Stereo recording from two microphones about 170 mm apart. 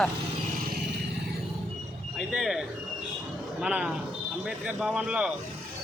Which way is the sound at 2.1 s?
5° right (ahead or behind).